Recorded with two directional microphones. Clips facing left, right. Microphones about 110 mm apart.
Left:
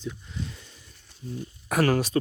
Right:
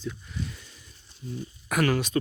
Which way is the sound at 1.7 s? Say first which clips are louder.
Left 2 dB; 35° left (ahead or behind).